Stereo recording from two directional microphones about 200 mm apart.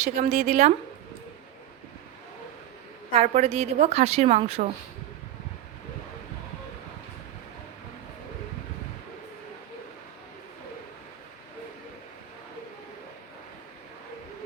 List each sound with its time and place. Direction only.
0.0 s a woman's voice: 35° right (ahead or behind)
3.1 s a woman's voice: 30° right (ahead or behind)